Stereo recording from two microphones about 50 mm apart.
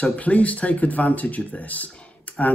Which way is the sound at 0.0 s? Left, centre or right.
Left.